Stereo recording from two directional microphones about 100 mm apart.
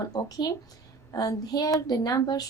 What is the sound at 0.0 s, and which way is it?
A woman's voice, 40° left (ahead or behind).